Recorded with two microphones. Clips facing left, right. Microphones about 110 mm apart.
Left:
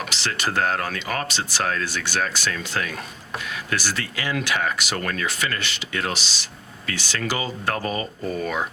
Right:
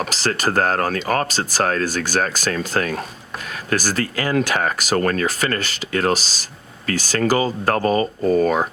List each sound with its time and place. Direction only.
0.1 s speech: 40° right (ahead or behind)